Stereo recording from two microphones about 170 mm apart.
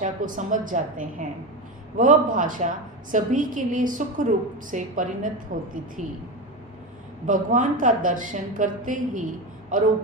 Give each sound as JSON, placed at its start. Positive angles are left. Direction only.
{"t": 0.0, "sound": "a woman's voice", "side_deg": -50}
{"t": 7.3, "sound": "a woman's voice", "side_deg": -50}